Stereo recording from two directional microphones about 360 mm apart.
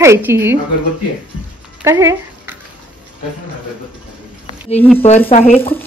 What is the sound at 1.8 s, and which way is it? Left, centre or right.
Speech, centre.